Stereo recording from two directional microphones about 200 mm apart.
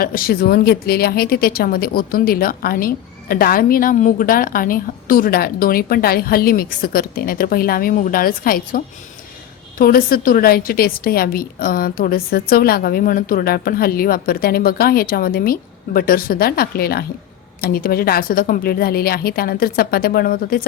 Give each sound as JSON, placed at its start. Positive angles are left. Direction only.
{"t": 0.0, "sound": "speech", "side_deg": 45}